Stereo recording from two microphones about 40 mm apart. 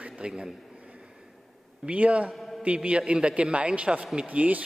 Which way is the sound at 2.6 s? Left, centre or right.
Right.